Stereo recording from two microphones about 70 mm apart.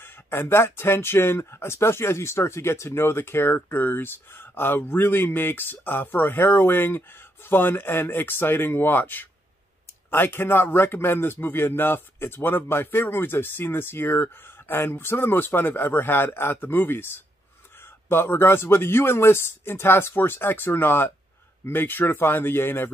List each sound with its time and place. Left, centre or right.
0.0 s speech: left